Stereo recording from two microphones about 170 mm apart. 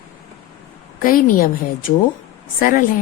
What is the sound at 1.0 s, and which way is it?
Speech, 55° left (ahead or behind).